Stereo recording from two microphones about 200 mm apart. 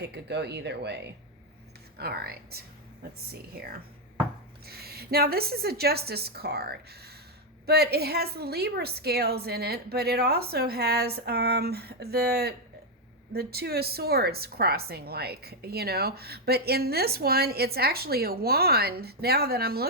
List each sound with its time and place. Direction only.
0.0 s a woman's voice: 55° right (ahead or behind)